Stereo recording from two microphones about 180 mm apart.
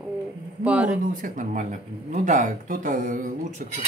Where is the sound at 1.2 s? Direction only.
45° right (ahead or behind).